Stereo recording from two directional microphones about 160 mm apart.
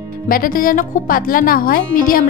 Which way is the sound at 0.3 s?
60° left (ahead or behind).